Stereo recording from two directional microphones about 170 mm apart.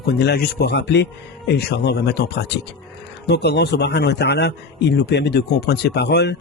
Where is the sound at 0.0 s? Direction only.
70° left (ahead or behind).